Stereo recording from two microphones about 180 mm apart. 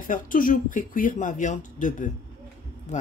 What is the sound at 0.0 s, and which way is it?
Speech, 50° left (ahead or behind).